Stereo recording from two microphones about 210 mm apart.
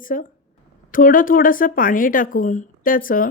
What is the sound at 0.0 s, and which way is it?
A woman's voice, 40° left (ahead or behind).